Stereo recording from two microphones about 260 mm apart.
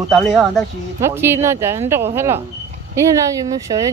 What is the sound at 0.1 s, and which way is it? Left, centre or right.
Speech, centre.